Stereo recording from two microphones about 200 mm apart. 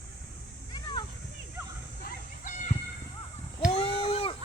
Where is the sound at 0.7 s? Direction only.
20° left (ahead or behind).